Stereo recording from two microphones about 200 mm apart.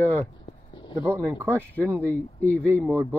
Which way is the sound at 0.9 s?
10° right (ahead or behind).